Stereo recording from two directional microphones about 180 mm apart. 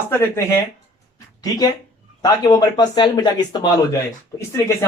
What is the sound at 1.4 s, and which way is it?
Speech, 20° left (ahead or behind).